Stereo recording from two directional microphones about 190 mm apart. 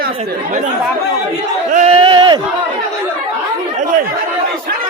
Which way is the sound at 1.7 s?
35° right (ahead or behind).